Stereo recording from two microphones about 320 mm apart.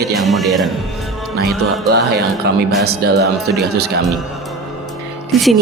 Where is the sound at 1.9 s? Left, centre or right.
Right.